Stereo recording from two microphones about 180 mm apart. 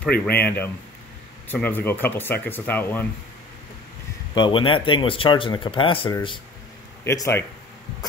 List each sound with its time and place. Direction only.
0.3 s speech: 10° left (ahead or behind)
4.4 s speech: 30° left (ahead or behind)
7.1 s speech: 15° left (ahead or behind)